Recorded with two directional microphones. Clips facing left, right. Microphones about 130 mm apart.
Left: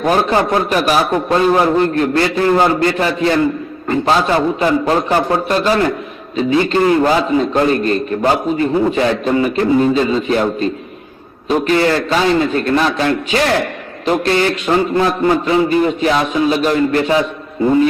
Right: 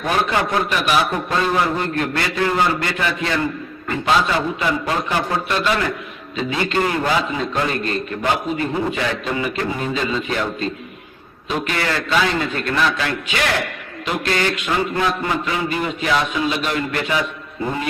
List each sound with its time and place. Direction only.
0.0 s a man's voice: 35° left (ahead or behind)